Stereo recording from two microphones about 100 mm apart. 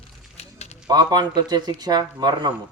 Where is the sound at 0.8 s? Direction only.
40° right (ahead or behind).